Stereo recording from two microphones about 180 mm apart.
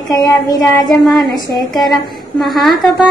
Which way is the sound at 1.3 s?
25° left (ahead or behind).